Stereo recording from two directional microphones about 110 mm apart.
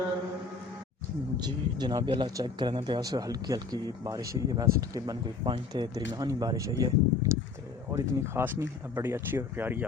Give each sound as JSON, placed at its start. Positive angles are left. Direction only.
{"t": 1.4, "sound": "speech", "side_deg": -40}